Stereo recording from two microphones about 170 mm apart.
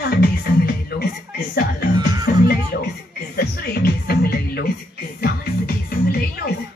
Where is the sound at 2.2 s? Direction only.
65° left (ahead or behind).